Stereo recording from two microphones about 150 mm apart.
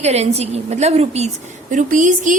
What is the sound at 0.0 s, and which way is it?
A woman's voice, 45° right (ahead or behind).